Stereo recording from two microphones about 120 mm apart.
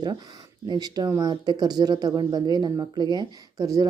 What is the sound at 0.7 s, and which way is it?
Speech, 35° right (ahead or behind).